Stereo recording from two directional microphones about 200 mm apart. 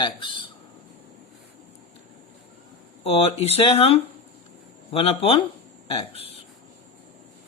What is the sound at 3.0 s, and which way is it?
Speech, 30° left (ahead or behind).